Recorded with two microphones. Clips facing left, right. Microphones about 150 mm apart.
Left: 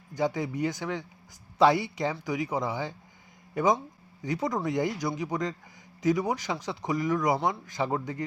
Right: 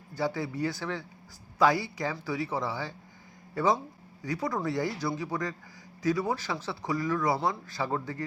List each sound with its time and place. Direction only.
0.1 s speech: 20° left (ahead or behind)